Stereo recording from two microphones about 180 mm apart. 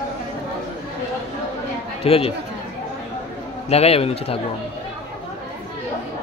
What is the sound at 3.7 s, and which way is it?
Speech, 35° left (ahead or behind).